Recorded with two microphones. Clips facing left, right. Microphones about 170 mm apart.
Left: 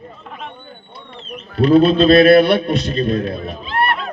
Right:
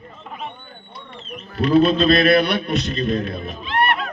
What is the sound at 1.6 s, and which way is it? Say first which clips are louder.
A man's voice: left 4 dB; 30° left (ahead or behind).